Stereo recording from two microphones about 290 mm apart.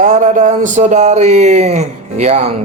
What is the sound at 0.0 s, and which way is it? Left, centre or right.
Speech, right.